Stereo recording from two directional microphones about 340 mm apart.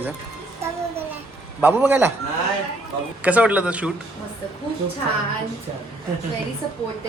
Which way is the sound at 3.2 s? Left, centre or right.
Centre.